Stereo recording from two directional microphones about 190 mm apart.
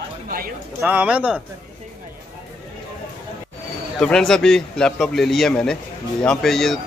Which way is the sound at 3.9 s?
5° left (ahead or behind).